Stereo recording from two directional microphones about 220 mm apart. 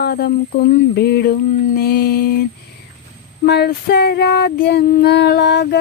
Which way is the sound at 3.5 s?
50° left (ahead or behind).